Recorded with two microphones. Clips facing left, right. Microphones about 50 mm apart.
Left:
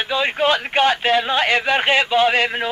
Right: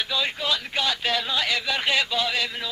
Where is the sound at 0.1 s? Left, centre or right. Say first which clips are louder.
Left 11 dB; left.